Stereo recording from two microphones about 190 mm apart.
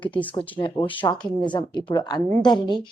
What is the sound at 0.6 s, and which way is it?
A woman's voice, 25° left (ahead or behind).